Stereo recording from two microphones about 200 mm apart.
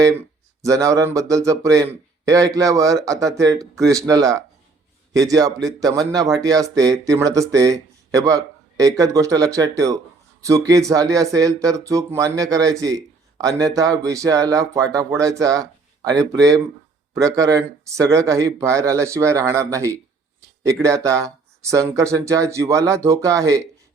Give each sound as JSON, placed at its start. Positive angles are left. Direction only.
{"t": 0.0, "sound": "speech", "side_deg": -15}